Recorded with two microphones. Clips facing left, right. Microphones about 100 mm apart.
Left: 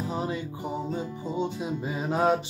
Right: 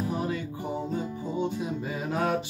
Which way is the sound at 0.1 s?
25° left (ahead or behind).